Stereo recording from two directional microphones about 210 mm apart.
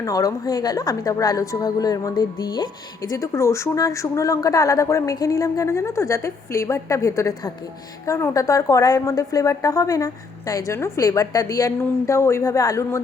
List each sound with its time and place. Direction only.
0.0 s a woman's voice: 15° left (ahead or behind)